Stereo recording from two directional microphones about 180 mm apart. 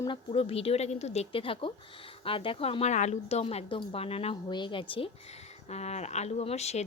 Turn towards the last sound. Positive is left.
turn(degrees=35)  # may be behind; listen again after turning